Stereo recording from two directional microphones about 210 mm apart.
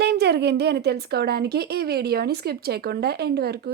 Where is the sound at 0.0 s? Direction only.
50° right (ahead or behind).